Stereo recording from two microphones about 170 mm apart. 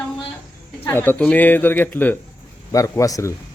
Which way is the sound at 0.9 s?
10° left (ahead or behind).